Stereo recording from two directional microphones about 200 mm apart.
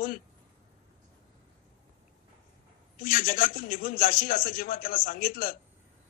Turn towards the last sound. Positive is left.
turn(degrees=45)  # may be behind; listen again after turning